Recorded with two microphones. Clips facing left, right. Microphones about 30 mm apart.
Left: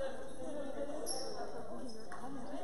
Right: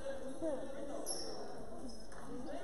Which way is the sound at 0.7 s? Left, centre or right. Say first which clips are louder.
Left 3 dB; centre.